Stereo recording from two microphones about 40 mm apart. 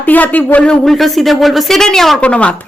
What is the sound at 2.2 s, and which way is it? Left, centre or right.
Speech, left.